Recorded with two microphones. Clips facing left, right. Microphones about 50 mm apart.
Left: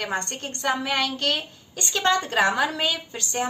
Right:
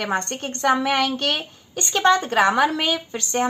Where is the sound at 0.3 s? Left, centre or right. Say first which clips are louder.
Right 6 dB; right.